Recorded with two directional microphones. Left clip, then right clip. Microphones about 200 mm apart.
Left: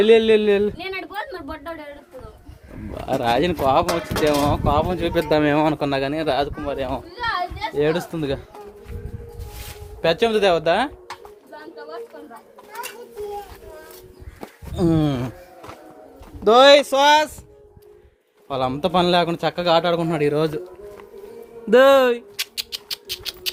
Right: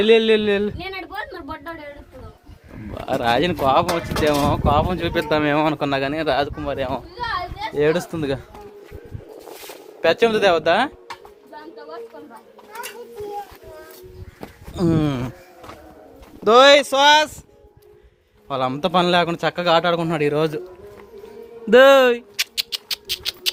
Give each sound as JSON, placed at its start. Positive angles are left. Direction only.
{"t": 0.0, "sound": "speech", "side_deg": 10}
{"t": 2.9, "sound": "speech", "side_deg": 5}
{"t": 7.8, "sound": "speech", "side_deg": -25}
{"t": 10.0, "sound": "speech", "side_deg": -20}
{"t": 14.4, "sound": "a sound", "side_deg": 5}
{"t": 16.4, "sound": "speech", "side_deg": 5}
{"t": 18.4, "sound": "speech", "side_deg": 5}
{"t": 21.7, "sound": "rodents", "side_deg": 0}